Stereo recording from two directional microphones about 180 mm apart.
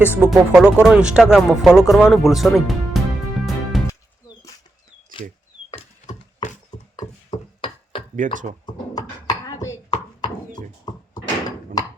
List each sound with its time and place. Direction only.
0.2 s speech: 5° right (ahead or behind)
3.4 s music: centre (ahead or behind)
6.9 s a sound: 25° left (ahead or behind)
8.1 s speech: 45° right (ahead or behind)
8.6 s chopping: 20° left (ahead or behind)